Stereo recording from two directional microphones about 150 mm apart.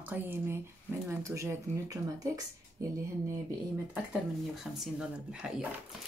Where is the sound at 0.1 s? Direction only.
15° right (ahead or behind).